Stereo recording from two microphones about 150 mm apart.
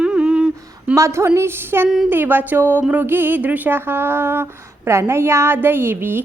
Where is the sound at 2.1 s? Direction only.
15° right (ahead or behind).